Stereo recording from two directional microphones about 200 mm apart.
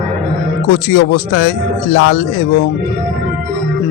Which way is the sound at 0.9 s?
55° left (ahead or behind).